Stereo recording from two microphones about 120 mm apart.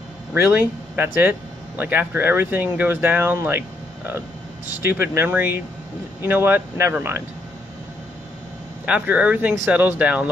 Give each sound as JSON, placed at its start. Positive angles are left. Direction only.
{"t": 0.3, "sound": "speech", "side_deg": -15}
{"t": 8.8, "sound": "speech", "side_deg": -10}